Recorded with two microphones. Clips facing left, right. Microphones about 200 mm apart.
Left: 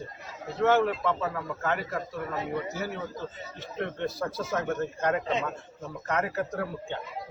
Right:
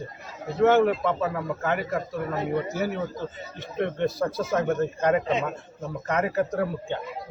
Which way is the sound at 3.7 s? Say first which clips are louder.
Right 6 dB; 15° right (ahead or behind).